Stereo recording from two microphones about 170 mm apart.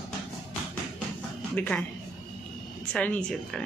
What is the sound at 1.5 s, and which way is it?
Speech, 5° left (ahead or behind).